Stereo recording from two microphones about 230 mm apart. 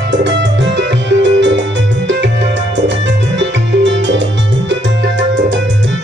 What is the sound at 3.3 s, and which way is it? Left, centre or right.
Music, right.